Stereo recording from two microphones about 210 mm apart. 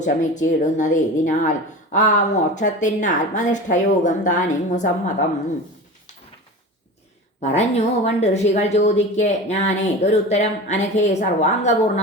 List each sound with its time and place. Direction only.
0.0 s a woman's voice: 35° left (ahead or behind)
7.5 s a woman's voice: 30° left (ahead or behind)